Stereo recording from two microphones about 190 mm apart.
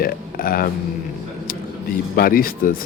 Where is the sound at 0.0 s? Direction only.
50° left (ahead or behind).